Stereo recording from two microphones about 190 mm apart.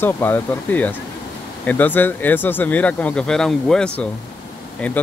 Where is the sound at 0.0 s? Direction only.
10° left (ahead or behind).